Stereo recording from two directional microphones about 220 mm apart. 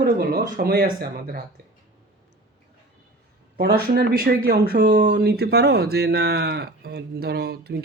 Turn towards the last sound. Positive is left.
turn(degrees=-45)  # may be behind; listen again after turning